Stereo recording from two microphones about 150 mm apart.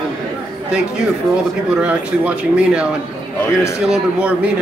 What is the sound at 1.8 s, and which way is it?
Speech, 10° right (ahead or behind).